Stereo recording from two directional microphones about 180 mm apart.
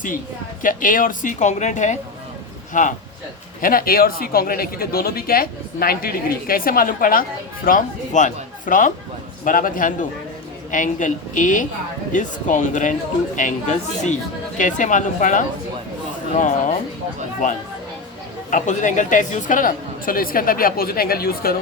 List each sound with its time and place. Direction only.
0.6 s speech: 50° left (ahead or behind)
18.5 s speech: 45° left (ahead or behind)